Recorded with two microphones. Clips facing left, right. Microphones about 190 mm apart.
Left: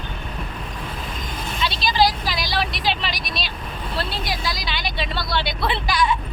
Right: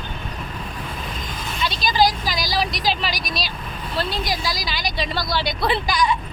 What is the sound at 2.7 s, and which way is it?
Vehicle, 40° right (ahead or behind).